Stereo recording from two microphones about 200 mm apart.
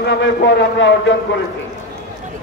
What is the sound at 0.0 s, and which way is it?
A man's voice, 60° left (ahead or behind).